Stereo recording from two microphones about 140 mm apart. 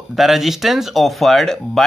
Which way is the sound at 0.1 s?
Centre (ahead or behind).